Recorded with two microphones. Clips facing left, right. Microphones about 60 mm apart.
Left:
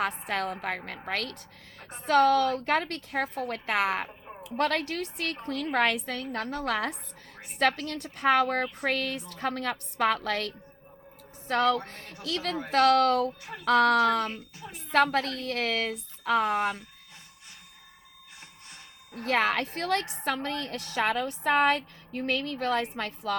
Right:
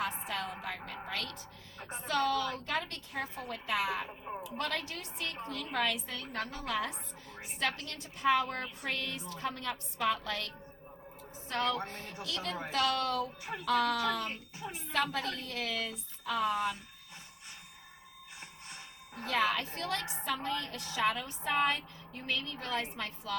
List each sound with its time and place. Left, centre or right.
0.3 s a woman's voice: left
13.4 s music: centre
13.7 s a woman's voice: left
14.6 s a woman's voice: centre
14.9 s a woman's voice: left
19.2 s a woman's voice: left